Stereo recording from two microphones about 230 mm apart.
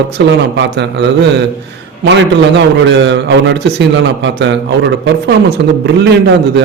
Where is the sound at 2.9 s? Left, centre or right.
Right.